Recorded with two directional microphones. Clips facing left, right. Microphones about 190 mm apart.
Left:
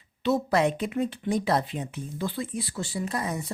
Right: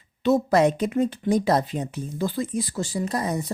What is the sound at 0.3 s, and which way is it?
Speech, 40° right (ahead or behind).